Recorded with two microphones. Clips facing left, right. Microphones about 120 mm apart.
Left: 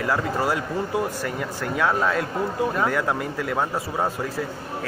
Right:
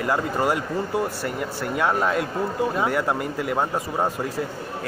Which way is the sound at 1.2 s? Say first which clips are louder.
Right 1 dB; 5° right (ahead or behind).